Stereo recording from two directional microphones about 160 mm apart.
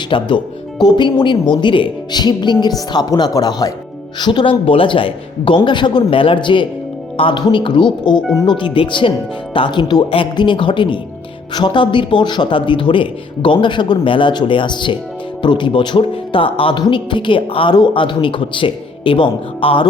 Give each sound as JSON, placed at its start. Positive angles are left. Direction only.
{"t": 0.1, "sound": "speech", "side_deg": 30}